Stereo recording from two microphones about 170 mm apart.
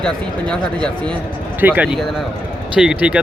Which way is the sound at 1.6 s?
10° right (ahead or behind).